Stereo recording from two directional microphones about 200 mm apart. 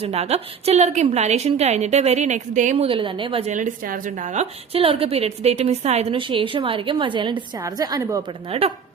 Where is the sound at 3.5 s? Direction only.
40° right (ahead or behind); by 8.3 s 20° right (ahead or behind).